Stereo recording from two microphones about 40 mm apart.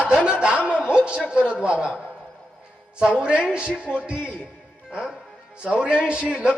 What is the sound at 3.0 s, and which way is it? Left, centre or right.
A man's voice, right.